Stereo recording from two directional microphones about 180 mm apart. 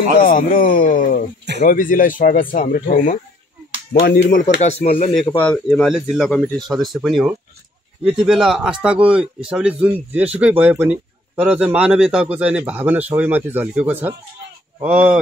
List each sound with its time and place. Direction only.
0.2 s speech: 50° left (ahead or behind)
4.0 s speech: 60° left (ahead or behind); by 4.8 s 40° left (ahead or behind)
4.8 s speech: 50° left (ahead or behind)
5.4 s speech: 5° left (ahead or behind)